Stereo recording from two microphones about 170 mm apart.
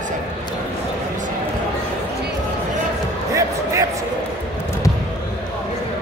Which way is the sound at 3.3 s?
20° right (ahead or behind).